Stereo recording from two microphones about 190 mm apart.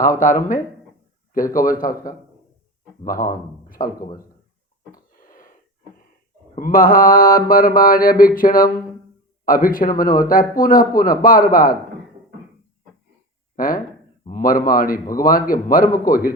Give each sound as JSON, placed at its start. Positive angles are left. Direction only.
{"t": 0.2, "sound": "speech", "side_deg": 45}
{"t": 1.8, "sound": "speech", "side_deg": 45}
{"t": 3.0, "sound": "speech", "side_deg": 45}
{"t": 5.2, "sound": "wheeze", "side_deg": 45}
{"t": 6.6, "sound": "speech", "side_deg": 50}
{"t": 13.6, "sound": "a sound", "side_deg": 45}
{"t": 14.3, "sound": "speech", "side_deg": 45}